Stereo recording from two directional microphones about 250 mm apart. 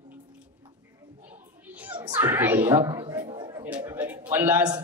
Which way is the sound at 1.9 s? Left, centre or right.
Centre.